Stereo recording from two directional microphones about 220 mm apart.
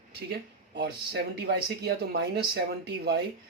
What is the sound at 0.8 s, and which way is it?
Speech, 45° right (ahead or behind).